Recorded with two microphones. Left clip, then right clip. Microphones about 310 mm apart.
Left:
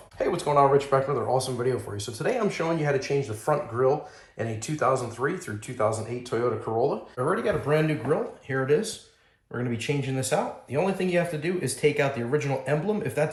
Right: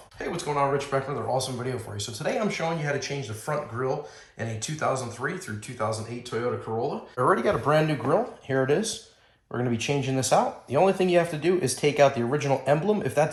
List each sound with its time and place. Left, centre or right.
0.2 s speech: centre
7.3 s speech: centre